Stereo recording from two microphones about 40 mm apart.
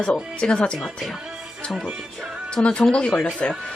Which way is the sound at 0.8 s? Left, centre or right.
Centre.